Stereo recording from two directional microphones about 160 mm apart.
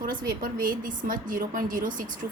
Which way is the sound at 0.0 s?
60° right (ahead or behind).